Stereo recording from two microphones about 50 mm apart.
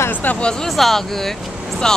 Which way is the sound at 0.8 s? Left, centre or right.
Centre.